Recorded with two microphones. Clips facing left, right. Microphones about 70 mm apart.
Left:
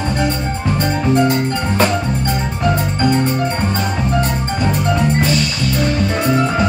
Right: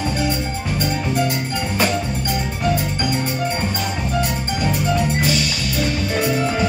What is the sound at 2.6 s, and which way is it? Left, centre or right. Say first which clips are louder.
Music: left 5 dB; left.